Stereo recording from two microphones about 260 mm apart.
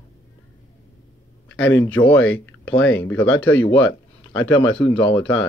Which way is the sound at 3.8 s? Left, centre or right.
Left.